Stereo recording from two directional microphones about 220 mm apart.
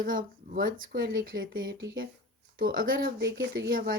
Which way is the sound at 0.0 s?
40° right (ahead or behind).